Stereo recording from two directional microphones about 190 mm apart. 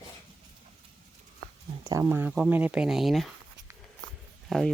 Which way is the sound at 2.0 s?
5° right (ahead or behind).